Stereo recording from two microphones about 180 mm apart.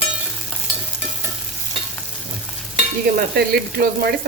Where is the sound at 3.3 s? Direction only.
60° right (ahead or behind).